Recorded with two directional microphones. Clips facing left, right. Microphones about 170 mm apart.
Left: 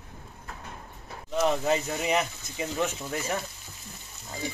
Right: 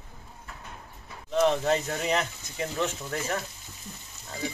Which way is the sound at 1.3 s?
10° left (ahead or behind).